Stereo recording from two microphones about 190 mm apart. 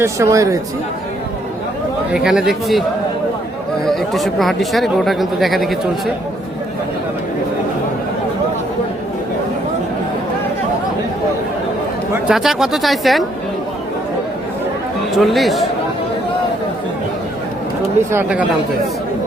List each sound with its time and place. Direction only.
0.0 s speech: 15° right (ahead or behind)
2.1 s speech: 5° right (ahead or behind)
3.8 s speech: centre (ahead or behind)
12.3 s speech: centre (ahead or behind)
15.1 s speech: centre (ahead or behind)
18.1 s speech: 10° right (ahead or behind)